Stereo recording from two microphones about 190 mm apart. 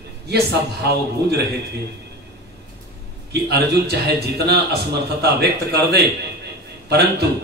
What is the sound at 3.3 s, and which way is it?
A man's voice, 60° right (ahead or behind).